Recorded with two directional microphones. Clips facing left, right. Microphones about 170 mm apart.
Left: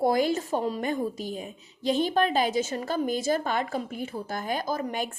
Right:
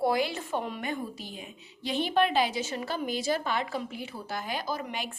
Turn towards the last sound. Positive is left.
turn(degrees=45)  # may be behind; listen again after turning